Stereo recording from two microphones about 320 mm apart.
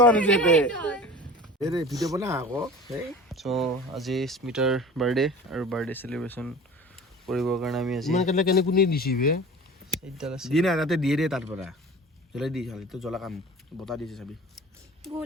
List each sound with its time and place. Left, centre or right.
0.0 s speech: centre
1.6 s speech: centre
8.1 s speech: left
10.2 s speech: centre